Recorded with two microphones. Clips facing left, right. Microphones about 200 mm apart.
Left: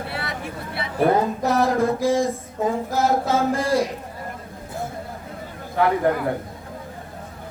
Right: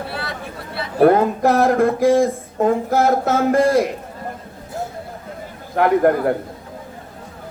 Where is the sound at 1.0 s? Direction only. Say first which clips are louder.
Right 6 dB; 60° right (ahead or behind).